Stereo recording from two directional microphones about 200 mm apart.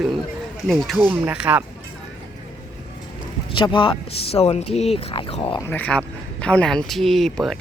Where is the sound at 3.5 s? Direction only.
25° left (ahead or behind).